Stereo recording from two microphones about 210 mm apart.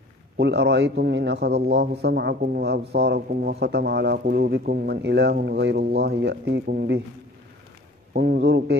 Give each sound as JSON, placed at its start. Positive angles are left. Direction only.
{"t": 0.4, "sound": "a man's voice", "side_deg": -55}
{"t": 8.1, "sound": "a man's voice", "side_deg": -50}